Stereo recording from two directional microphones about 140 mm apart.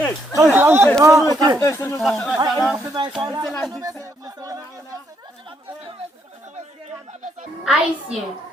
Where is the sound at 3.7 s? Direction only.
25° right (ahead or behind).